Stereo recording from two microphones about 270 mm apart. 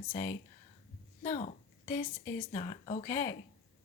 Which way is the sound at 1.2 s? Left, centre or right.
Left.